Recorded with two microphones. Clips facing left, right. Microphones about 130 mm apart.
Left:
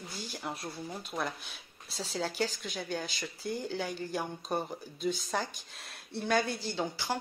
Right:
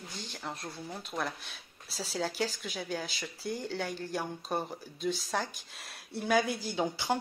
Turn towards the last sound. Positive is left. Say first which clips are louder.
# right 3 dB
turn(degrees=-15)  # may be behind; listen again after turning